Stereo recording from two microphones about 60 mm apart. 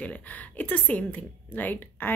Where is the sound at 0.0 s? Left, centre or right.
Left.